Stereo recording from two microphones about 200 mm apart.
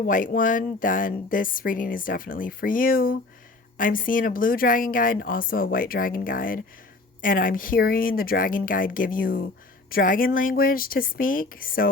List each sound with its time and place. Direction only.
0.0 s a woman's voice: 40° left (ahead or behind)